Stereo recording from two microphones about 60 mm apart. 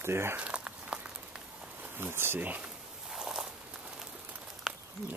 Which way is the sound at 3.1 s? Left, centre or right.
Centre.